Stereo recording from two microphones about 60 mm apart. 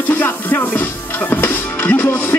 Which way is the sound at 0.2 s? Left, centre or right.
Left.